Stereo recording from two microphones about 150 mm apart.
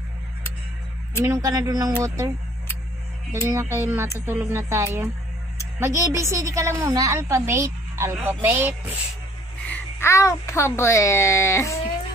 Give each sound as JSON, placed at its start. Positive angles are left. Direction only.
{"t": 1.2, "sound": "speech", "side_deg": -20}
{"t": 3.4, "sound": "a woman's voice", "side_deg": -20}
{"t": 9.7, "sound": "a child's voice", "side_deg": 15}